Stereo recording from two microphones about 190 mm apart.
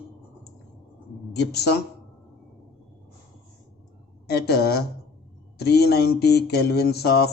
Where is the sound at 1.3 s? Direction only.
60° left (ahead or behind).